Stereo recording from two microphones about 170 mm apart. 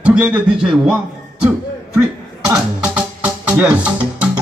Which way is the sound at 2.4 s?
20° right (ahead or behind).